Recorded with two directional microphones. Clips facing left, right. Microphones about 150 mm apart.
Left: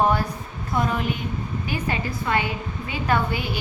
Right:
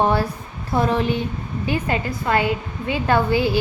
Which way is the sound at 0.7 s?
30° right (ahead or behind).